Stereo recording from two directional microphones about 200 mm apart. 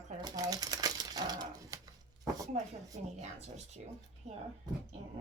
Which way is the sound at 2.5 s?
35° right (ahead or behind).